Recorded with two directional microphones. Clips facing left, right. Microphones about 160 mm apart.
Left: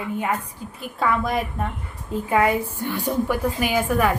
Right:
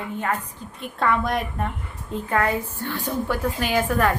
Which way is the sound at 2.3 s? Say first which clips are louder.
Left 3 dB; 10° left (ahead or behind).